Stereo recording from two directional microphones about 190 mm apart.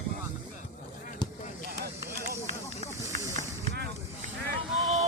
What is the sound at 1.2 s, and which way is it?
Basketball bounce, 25° left (ahead or behind).